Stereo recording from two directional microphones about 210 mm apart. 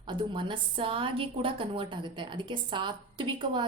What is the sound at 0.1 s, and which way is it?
A woman's voice, 25° right (ahead or behind).